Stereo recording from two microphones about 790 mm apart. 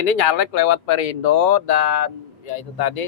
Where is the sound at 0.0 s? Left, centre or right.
Left.